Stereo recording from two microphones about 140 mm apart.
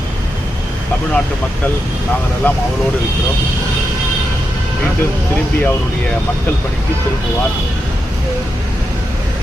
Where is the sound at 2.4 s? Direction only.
10° left (ahead or behind).